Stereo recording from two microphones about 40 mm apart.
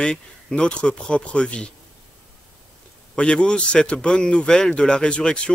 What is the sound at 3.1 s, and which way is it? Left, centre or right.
A man's voice, left.